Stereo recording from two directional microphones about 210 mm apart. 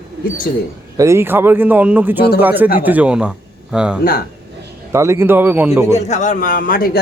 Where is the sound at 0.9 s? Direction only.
15° right (ahead or behind).